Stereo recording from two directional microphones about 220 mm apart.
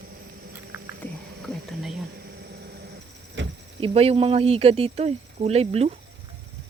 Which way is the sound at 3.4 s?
55° right (ahead or behind).